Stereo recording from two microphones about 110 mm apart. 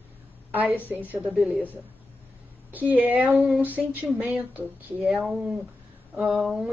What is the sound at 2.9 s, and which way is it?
Speech, 15° right (ahead or behind).